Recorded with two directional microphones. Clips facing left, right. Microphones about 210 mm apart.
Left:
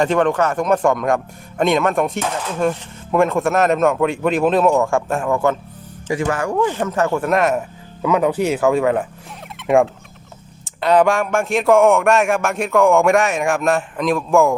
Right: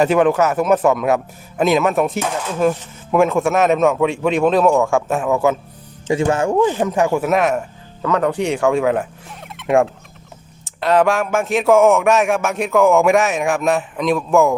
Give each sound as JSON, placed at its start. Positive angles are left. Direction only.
{"t": 0.0, "sound": "a man's voice", "side_deg": -5}
{"t": 6.1, "sound": "a man's voice", "side_deg": -25}